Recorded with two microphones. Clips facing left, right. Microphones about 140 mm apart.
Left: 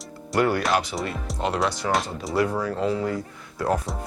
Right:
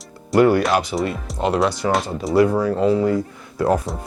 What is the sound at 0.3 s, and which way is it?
Speech, 15° right (ahead or behind).